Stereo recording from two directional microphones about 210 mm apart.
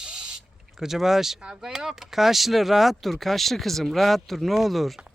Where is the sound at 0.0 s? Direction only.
5° right (ahead or behind).